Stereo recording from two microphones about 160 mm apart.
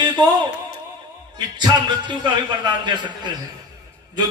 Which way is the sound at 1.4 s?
25° right (ahead or behind).